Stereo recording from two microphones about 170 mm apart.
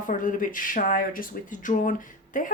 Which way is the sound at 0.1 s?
50° left (ahead or behind).